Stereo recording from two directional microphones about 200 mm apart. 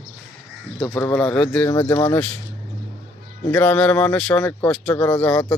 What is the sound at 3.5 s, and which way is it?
Speech, 5° left (ahead or behind).